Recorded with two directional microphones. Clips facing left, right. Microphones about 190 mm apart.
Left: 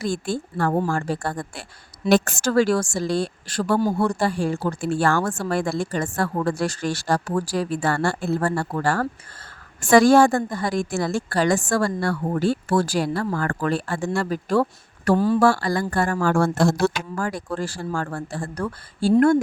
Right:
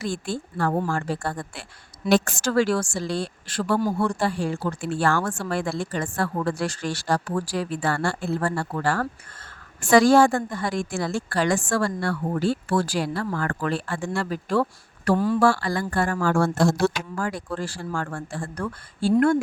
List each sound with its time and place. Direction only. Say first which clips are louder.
0.0 s speech: left 3 dB; 45° left (ahead or behind)
9.8 s speech: left 2 dB; 50° left (ahead or behind)